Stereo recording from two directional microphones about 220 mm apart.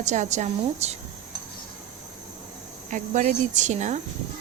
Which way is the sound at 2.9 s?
35° right (ahead or behind).